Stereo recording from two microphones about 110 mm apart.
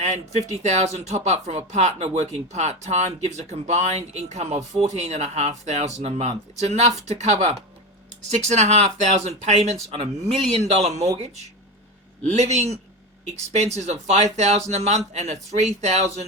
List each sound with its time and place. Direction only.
0.0 s speech: 90° right
10.8 s speech: 85° right